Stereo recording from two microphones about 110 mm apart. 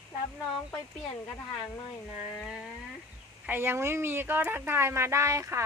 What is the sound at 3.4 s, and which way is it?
Speech, 20° right (ahead or behind).